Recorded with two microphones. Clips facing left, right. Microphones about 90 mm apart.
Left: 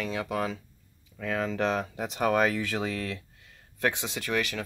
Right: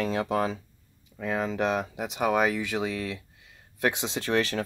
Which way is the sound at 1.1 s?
15° right (ahead or behind).